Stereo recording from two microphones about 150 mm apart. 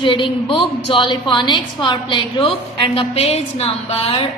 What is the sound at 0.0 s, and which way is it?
A woman's voice, 35° left (ahead or behind).